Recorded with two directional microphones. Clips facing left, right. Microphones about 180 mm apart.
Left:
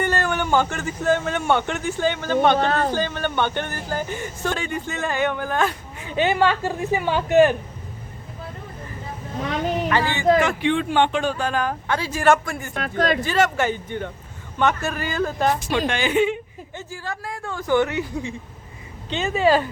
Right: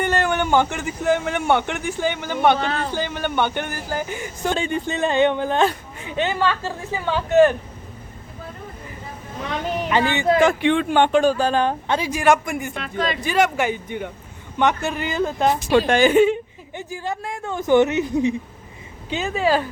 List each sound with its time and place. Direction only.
0.0 s a man's voice: 15° right (ahead or behind)
2.6 s speech: 45° left (ahead or behind)
2.9 s speech: 15° right (ahead or behind)
4.5 s speech: 25° right (ahead or behind)
6.1 s a woman's voice: 10° left (ahead or behind)
9.9 s speech: 20° right (ahead or behind)
10.6 s speech: 60° right (ahead or behind); by 12.7 s 15° right (ahead or behind)
12.7 s speech: 50° left (ahead or behind)
13.2 s speech: 10° right (ahead or behind)
15.2 s speech: centre (ahead or behind)
15.9 s speech: 45° right (ahead or behind)
16.7 s speech: 20° right (ahead or behind)
19.1 s speech: centre (ahead or behind)